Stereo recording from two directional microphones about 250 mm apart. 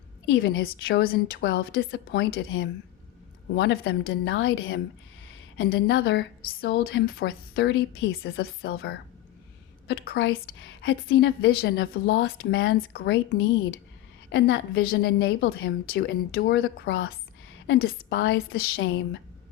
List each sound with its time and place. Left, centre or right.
0.3 s a woman's voice: left